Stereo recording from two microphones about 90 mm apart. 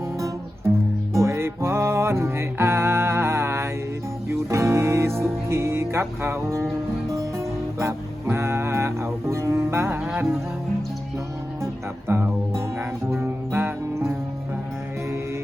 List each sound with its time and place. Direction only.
1.1 s music: 30° right (ahead or behind)
11.6 s music: 25° right (ahead or behind)